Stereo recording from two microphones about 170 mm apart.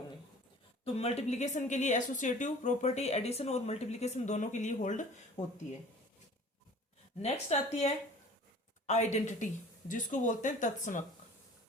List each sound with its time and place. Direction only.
0.9 s speech: 40° left (ahead or behind)
7.2 s a woman's voice: 40° left (ahead or behind)